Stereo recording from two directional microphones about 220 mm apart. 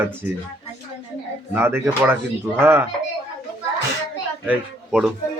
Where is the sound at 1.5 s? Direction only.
10° right (ahead or behind).